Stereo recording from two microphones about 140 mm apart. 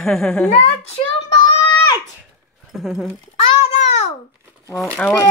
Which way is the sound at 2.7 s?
Centre (ahead or behind).